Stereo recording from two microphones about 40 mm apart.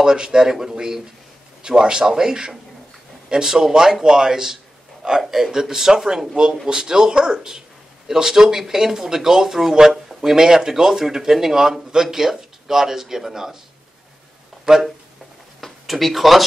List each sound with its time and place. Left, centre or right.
0.0 s speech: centre
14.6 s a sound: centre
15.9 s speech: centre